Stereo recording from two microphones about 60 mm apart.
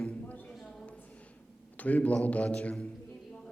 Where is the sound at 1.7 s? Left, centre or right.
Left.